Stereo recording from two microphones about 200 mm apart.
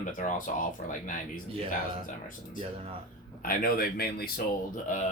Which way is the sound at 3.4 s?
45° left (ahead or behind).